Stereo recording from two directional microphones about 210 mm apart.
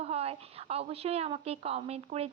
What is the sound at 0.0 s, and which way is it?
A woman's voice, 30° right (ahead or behind).